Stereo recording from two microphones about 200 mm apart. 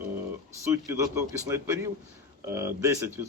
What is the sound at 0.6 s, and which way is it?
Speech, 15° right (ahead or behind).